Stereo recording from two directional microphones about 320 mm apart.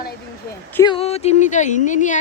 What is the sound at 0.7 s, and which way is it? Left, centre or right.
Speech, centre.